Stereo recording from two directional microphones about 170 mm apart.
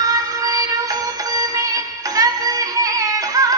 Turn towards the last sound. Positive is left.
turn(degrees=-20)  # may be behind; listen again after turning